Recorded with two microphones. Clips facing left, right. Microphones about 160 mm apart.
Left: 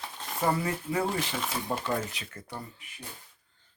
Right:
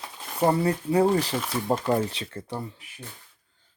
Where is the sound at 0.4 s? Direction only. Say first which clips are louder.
Right 6 dB; 35° right (ahead or behind).